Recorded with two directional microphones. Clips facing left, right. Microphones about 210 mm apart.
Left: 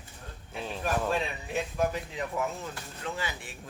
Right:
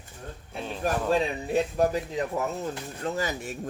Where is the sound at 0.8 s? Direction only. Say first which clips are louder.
Right 5 dB; 40° right (ahead or behind).